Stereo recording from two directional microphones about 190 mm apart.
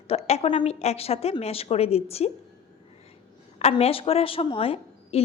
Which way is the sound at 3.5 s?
35° left (ahead or behind).